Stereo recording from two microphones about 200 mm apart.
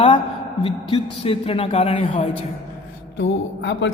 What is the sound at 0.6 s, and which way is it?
Speech, 25° left (ahead or behind).